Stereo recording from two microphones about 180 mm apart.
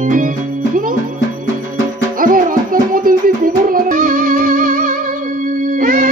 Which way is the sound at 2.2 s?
50° right (ahead or behind).